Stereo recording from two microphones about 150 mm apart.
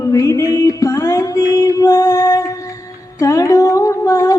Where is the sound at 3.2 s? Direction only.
20° left (ahead or behind).